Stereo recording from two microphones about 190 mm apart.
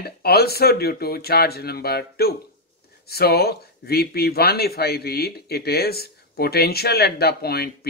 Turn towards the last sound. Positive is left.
turn(degrees=55)  # may be behind; listen again after turning